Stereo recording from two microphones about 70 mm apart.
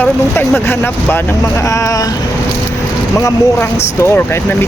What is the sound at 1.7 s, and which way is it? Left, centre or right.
Speech, left.